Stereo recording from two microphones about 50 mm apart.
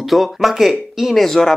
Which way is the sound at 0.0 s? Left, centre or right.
Centre.